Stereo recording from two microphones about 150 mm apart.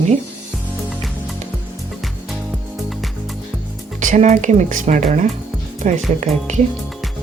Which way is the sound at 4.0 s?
55° right (ahead or behind).